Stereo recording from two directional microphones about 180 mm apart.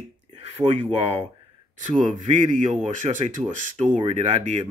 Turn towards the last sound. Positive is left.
turn(degrees=-35)  # may be behind; listen again after turning